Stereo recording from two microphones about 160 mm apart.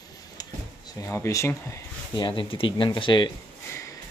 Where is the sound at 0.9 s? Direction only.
20° left (ahead or behind).